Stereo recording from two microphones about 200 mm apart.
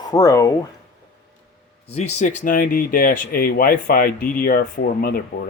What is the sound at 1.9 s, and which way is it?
Speech, 35° left (ahead or behind).